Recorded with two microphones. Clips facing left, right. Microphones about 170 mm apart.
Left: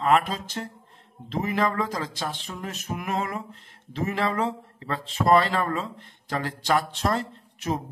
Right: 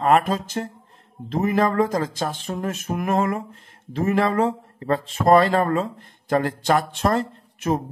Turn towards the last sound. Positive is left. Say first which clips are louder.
# right 6 dB
turn(degrees=-50)  # may be behind; listen again after turning